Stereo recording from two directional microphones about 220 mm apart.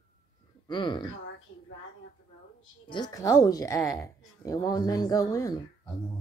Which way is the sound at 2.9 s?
15° left (ahead or behind).